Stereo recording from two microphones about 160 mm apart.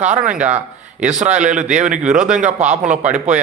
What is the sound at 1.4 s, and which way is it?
A man's voice, 50° right (ahead or behind).